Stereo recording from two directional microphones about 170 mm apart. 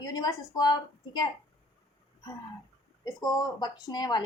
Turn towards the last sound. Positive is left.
turn(degrees=25)  # may be behind; listen again after turning